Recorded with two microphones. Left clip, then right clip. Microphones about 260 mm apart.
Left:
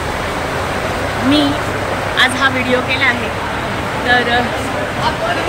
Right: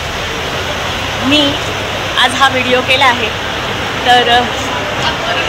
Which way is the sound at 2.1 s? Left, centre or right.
Centre.